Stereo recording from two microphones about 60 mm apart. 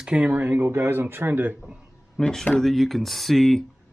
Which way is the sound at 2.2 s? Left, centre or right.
Centre.